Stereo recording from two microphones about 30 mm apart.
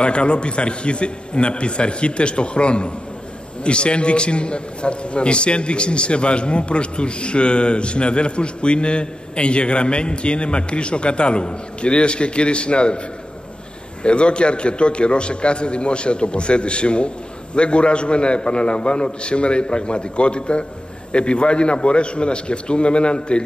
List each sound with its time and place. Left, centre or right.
0.0 s a man's voice: left
14.0 s a man's voice: left